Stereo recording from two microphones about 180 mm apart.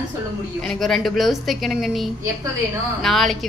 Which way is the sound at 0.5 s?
Centre (ahead or behind).